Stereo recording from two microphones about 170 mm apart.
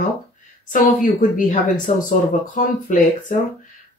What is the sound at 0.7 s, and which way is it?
Speech, 55° left (ahead or behind).